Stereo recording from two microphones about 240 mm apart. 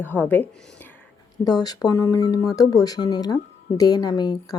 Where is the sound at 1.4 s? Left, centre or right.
Centre.